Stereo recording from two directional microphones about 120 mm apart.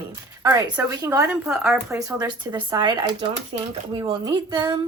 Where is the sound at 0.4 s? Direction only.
30° right (ahead or behind).